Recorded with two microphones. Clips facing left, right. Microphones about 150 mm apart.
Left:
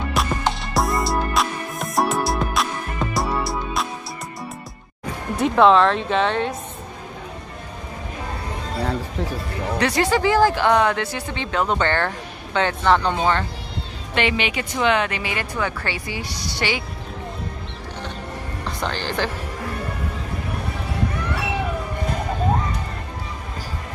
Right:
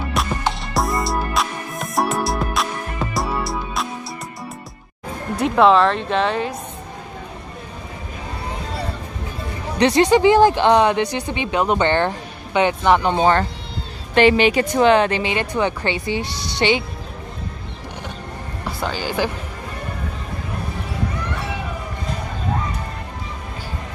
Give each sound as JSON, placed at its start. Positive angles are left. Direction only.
{"t": 0.1, "sound": "music", "side_deg": 0}
{"t": 5.4, "sound": "speech", "side_deg": 0}
{"t": 9.8, "sound": "speech", "side_deg": -20}
{"t": 13.1, "sound": "speech", "side_deg": -40}
{"t": 18.8, "sound": "speech", "side_deg": -5}